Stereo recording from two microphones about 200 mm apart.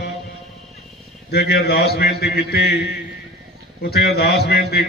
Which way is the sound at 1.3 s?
50° left (ahead or behind).